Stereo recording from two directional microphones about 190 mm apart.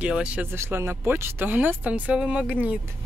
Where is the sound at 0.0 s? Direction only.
5° right (ahead or behind).